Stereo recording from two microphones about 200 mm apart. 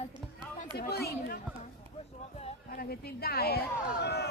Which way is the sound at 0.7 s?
50° left (ahead or behind).